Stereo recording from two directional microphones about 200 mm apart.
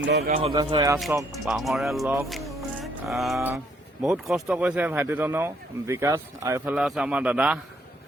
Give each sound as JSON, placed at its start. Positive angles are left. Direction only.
{"t": 0.0, "sound": "speech", "side_deg": -55}
{"t": 0.3, "sound": "a man's voice", "side_deg": -25}
{"t": 1.5, "sound": "a man's voice", "side_deg": 0}
{"t": 2.3, "sound": "music", "side_deg": 0}
{"t": 4.0, "sound": "speech", "side_deg": 0}
{"t": 6.7, "sound": "a man's voice", "side_deg": 0}